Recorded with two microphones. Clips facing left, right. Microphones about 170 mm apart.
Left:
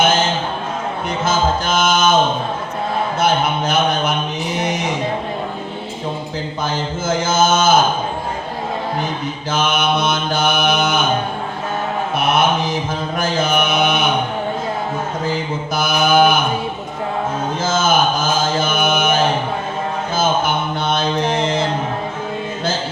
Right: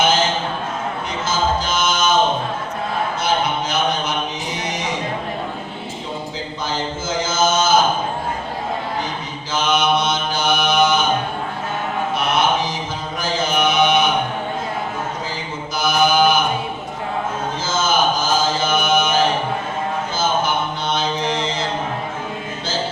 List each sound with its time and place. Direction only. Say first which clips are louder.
1.2 s music: left 2 dB; 55° left (ahead or behind)
3.2 s a sound: left 4 dB; 55° left (ahead or behind)
7.3 s a sound: left 3 dB; 55° left (ahead or behind)
9.5 s mantra: even; 55° left (ahead or behind)
12.1 s mantra: left 3 dB; 55° left (ahead or behind)
15.7 s mantra: left 1 dB; 55° left (ahead or behind)
17.6 s chant: left 3 dB; 55° left (ahead or behind)
20.1 s mantra: left 3 dB; 55° left (ahead or behind)